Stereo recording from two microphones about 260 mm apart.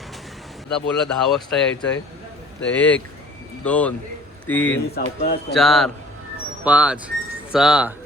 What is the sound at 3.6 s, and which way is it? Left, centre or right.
Speech, centre.